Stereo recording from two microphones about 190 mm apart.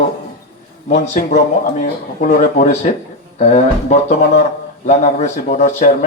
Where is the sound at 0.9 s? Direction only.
40° left (ahead or behind).